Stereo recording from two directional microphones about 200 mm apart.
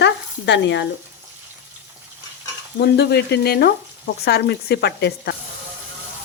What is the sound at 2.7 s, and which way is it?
Frying, 55° left (ahead or behind).